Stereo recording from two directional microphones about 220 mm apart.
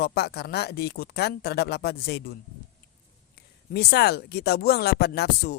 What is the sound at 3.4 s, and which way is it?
Speech, 45° left (ahead or behind).